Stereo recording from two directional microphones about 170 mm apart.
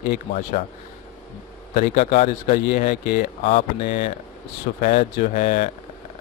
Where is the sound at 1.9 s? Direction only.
40° left (ahead or behind).